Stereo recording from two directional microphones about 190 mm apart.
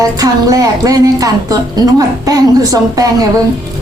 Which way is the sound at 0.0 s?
20° right (ahead or behind).